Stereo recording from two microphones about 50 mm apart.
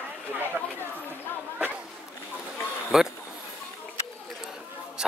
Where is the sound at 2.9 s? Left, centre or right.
Centre.